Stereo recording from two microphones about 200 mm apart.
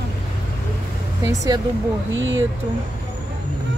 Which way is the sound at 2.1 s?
70° right (ahead or behind).